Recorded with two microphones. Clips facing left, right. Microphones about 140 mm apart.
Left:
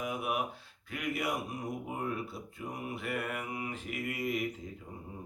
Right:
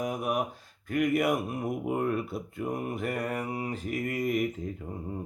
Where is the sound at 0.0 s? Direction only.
40° right (ahead or behind).